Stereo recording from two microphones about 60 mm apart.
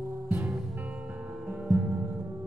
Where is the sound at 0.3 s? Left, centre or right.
Right.